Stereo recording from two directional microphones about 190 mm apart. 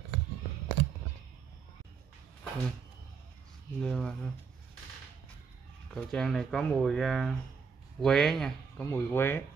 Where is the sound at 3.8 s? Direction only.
5° left (ahead or behind).